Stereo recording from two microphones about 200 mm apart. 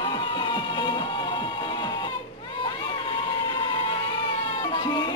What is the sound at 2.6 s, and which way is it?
Crowd, 25° left (ahead or behind).